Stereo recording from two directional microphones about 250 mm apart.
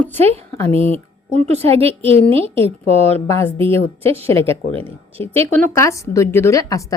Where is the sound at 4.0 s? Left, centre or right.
Right.